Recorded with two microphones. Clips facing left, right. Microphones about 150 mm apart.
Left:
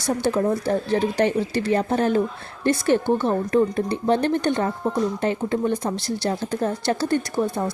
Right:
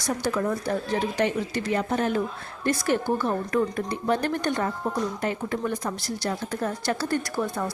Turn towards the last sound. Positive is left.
turn(degrees=20)  # may be behind; listen again after turning